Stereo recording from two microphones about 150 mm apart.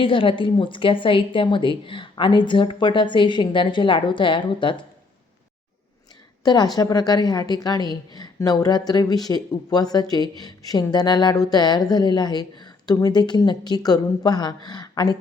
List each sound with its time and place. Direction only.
0.0 s a woman's voice: 35° left (ahead or behind)
6.4 s a woman's voice: 25° left (ahead or behind)